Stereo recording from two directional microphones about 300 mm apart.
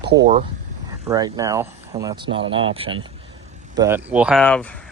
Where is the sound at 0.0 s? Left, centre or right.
Right.